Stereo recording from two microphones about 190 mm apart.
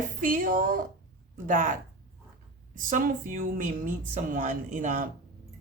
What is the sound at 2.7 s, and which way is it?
A woman's voice, 45° right (ahead or behind).